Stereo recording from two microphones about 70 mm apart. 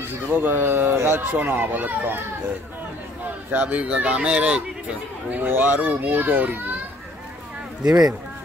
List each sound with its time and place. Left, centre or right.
0.3 s a child's voice: right
3.5 s speech: centre
5.3 s a child's voice: right